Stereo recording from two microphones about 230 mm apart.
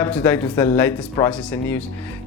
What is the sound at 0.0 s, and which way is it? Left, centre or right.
Speech, centre.